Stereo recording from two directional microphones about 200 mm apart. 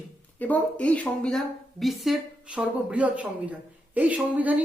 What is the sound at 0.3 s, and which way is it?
A woman's voice, 10° left (ahead or behind).